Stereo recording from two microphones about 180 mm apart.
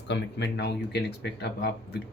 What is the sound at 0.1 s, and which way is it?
Speech, 75° left (ahead or behind).